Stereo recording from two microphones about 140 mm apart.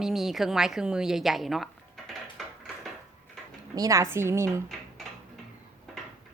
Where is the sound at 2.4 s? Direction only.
Centre (ahead or behind).